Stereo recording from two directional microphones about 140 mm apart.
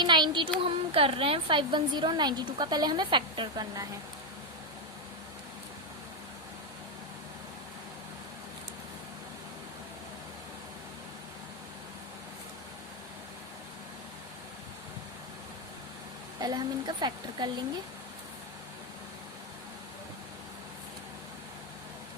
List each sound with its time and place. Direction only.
0.0 s a woman's voice: 30° right (ahead or behind)
16.4 s speech: 30° right (ahead or behind)